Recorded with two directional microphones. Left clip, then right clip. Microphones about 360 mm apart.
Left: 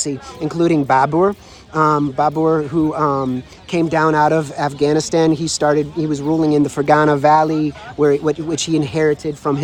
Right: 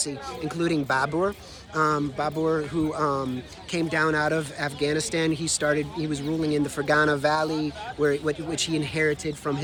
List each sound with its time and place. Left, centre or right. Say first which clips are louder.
0.0 s speech: left 8 dB; centre